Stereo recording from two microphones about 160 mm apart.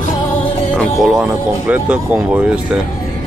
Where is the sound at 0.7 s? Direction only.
Centre (ahead or behind).